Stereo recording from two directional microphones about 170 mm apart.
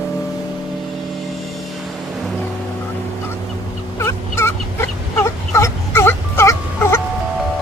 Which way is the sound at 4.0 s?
15° left (ahead or behind).